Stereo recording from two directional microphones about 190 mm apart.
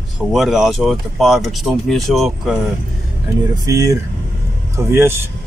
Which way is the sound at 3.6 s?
15° right (ahead or behind).